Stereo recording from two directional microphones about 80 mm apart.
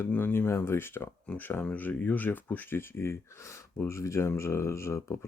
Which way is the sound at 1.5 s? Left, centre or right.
Left.